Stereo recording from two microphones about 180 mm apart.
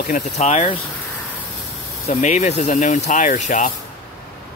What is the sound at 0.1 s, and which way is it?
Speech, 35° left (ahead or behind).